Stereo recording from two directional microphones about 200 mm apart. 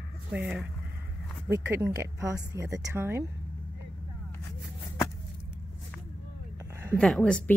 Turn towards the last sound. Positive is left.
turn(degrees=5)  # may be behind; listen again after turning